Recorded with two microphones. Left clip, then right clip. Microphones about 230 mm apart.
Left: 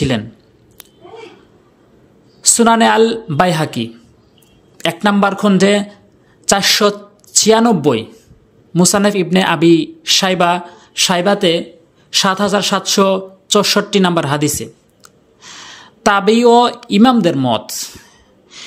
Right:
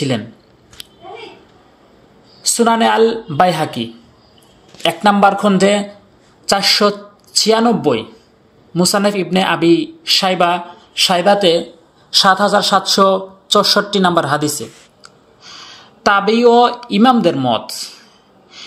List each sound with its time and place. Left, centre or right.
2.4 s speech: left
12.6 s speech: left